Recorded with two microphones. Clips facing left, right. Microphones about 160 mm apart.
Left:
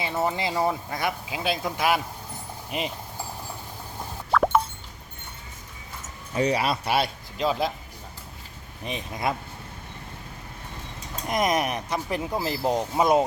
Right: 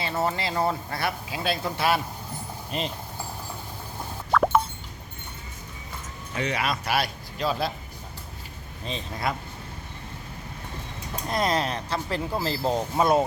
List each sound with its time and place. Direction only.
0.2 s speech: 15° left (ahead or behind)
4.3 s plop: centre (ahead or behind)
6.3 s speech: 35° left (ahead or behind); by 7.7 s 15° left (ahead or behind)
8.8 s speech: 15° left (ahead or behind)
11.3 s speech: 15° left (ahead or behind)